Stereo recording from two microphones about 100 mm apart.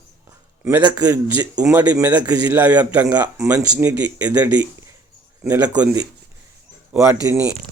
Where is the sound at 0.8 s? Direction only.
40° right (ahead or behind).